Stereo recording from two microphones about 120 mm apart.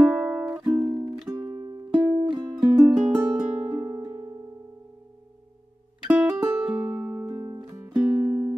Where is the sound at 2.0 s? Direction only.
40° right (ahead or behind).